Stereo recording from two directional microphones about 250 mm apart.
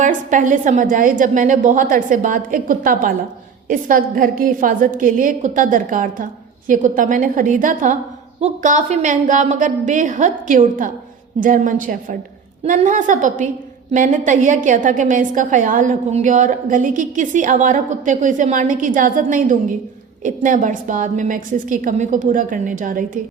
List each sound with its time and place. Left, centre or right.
0.0 s a woman's voice: right